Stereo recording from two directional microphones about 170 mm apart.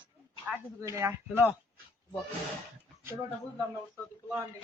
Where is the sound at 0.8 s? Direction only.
15° right (ahead or behind).